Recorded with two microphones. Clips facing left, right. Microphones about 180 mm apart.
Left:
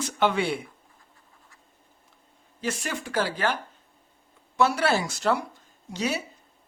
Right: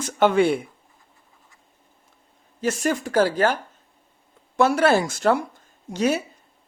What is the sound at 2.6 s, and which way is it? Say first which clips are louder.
Speech: right 8 dB; 45° right (ahead or behind).